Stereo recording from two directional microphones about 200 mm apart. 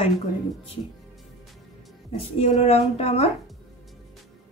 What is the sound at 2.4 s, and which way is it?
Speech, 30° left (ahead or behind).